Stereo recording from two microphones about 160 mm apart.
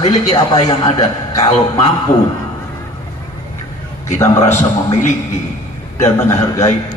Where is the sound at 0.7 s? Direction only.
25° left (ahead or behind).